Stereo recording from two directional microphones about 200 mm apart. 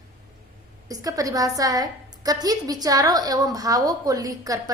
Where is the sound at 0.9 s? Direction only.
20° right (ahead or behind).